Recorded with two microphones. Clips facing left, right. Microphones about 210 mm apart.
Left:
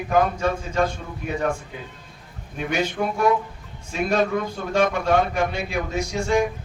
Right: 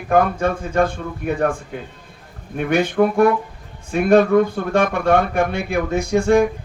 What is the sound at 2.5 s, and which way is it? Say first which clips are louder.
Speech: right 8 dB; 55° right (ahead or behind).